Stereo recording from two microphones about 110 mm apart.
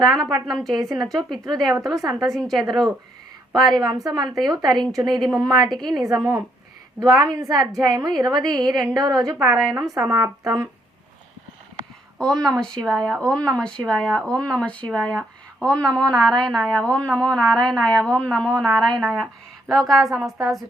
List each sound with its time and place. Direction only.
0.0 s a woman's voice: 40° right (ahead or behind)
0.4 s speech: centre (ahead or behind)
0.9 s a woman's voice: 35° right (ahead or behind)
1.1 s speech: 5° left (ahead or behind)
2.0 s a woman's voice: 30° right (ahead or behind)
2.2 s speech: centre (ahead or behind)
3.5 s a woman's voice: 35° right (ahead or behind)
12.2 s speech: 5° left (ahead or behind)